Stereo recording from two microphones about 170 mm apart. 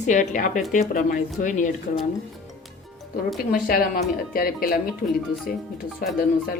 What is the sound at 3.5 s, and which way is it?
Speech, 60° left (ahead or behind).